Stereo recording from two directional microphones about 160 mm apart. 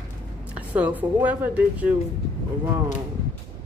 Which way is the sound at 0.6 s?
10° right (ahead or behind).